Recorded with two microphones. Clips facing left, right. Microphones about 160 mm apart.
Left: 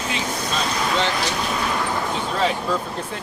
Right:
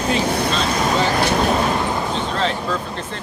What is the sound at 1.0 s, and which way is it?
Speech, 55° right (ahead or behind).